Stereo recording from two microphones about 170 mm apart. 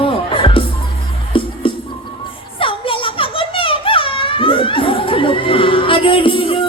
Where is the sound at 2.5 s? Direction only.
30° left (ahead or behind).